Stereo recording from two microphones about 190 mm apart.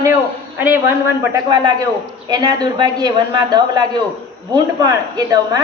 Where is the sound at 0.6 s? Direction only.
10° right (ahead or behind).